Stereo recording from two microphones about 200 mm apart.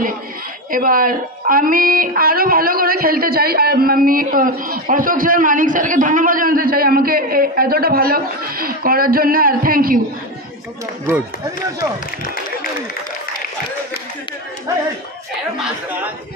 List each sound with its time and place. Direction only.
0.7 s a woman's voice: 45° right (ahead or behind)
11.1 s speech: 15° right (ahead or behind)
15.5 s speech: 5° right (ahead or behind)